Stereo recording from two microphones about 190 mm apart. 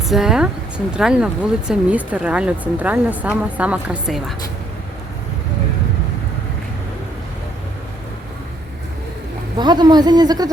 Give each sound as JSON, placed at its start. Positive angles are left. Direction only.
{"t": 0.1, "sound": "speech", "side_deg": -5}
{"t": 9.6, "sound": "speech", "side_deg": -20}